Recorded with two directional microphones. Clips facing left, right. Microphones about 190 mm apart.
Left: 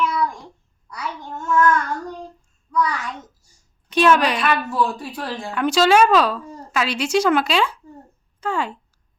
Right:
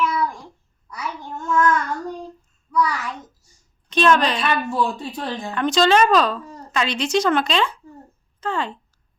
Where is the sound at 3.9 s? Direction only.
10° left (ahead or behind).